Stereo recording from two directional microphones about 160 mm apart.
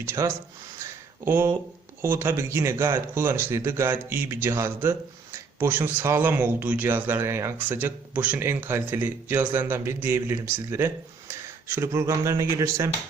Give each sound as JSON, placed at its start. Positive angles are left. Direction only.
{"t": 0.0, "sound": "speech", "side_deg": -15}
{"t": 0.8, "sound": "a sound", "side_deg": -15}
{"t": 2.0, "sound": "speech", "side_deg": -15}